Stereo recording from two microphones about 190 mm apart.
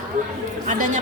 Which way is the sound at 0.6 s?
45° right (ahead or behind).